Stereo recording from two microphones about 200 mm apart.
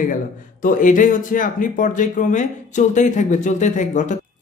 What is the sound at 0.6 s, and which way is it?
Speech, 40° left (ahead or behind).